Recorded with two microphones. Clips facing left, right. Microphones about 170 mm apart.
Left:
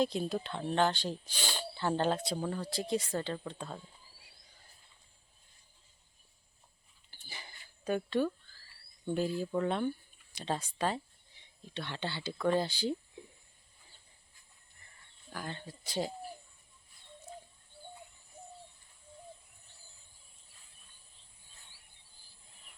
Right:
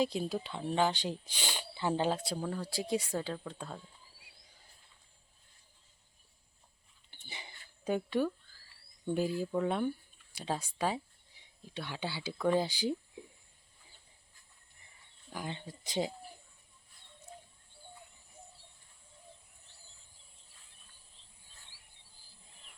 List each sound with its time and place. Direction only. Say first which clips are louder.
0.0 s speech: left 1 dB; 5° right (ahead or behind)
7.1 s a sound: right 1 dB; 20° right (ahead or behind)
9.4 s speech: even; 10° right (ahead or behind)
15.3 s speech: right 1 dB; 15° right (ahead or behind)